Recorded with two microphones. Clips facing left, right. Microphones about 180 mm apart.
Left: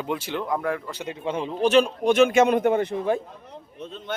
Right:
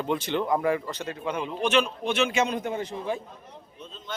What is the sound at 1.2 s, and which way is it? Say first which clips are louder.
A man's voice: left 5 dB; 30° left (ahead or behind).